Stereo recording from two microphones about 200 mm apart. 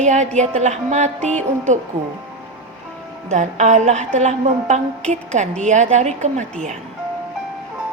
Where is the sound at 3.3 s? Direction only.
35° right (ahead or behind).